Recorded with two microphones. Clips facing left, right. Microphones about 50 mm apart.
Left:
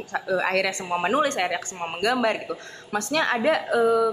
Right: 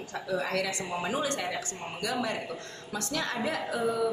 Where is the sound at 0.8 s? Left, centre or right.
Left.